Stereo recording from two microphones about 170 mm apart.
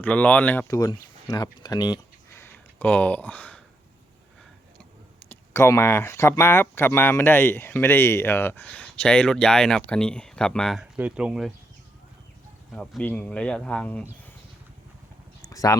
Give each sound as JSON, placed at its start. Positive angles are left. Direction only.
{"t": 0.0, "sound": "speech", "side_deg": 10}
{"t": 0.7, "sound": "speech", "side_deg": 20}
{"t": 5.3, "sound": "speech", "side_deg": 15}
{"t": 12.7, "sound": "speech", "side_deg": 5}
{"t": 15.4, "sound": "a sound", "side_deg": 20}